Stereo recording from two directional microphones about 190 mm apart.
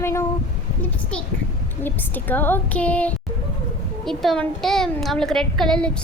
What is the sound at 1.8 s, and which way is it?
A woman's voice, 10° left (ahead or behind).